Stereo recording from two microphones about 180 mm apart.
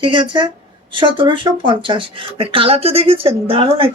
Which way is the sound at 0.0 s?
25° right (ahead or behind).